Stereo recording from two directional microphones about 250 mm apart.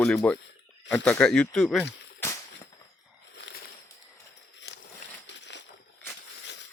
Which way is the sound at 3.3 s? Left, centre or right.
Left.